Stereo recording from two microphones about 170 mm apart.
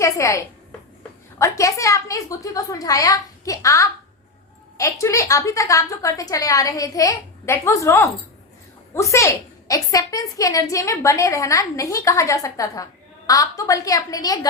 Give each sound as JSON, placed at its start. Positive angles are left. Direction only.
{"t": 0.0, "sound": "a woman's voice", "side_deg": 20}